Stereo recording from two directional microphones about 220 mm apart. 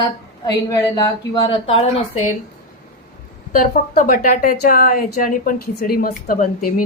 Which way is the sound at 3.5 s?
40° left (ahead or behind).